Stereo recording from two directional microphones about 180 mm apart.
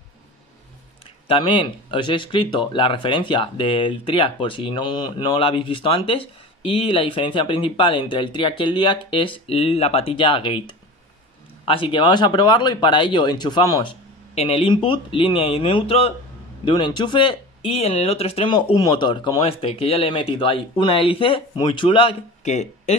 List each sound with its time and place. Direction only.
1.2 s speech: 30° left (ahead or behind)
14.3 s speech: 35° left (ahead or behind)